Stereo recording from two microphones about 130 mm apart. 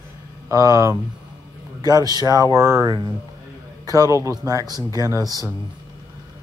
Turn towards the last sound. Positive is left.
turn(degrees=-30)  # may be behind; listen again after turning